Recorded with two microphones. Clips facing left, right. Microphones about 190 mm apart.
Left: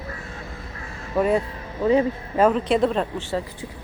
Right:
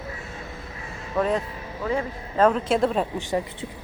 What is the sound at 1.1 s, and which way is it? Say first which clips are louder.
Speech: left 3 dB; 10° left (ahead or behind).